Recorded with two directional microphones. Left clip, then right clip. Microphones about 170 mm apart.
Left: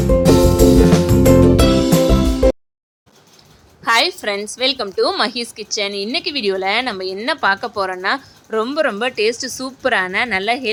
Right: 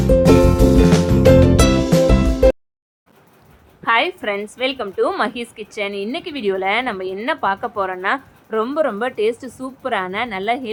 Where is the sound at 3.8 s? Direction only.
30° left (ahead or behind).